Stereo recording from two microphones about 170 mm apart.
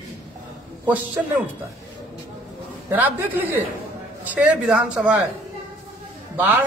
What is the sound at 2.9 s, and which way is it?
Speech, 10° right (ahead or behind).